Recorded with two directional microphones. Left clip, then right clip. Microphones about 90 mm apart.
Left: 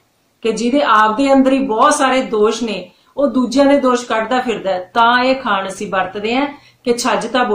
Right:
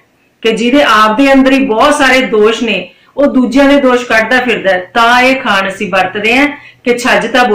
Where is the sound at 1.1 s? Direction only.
40° left (ahead or behind).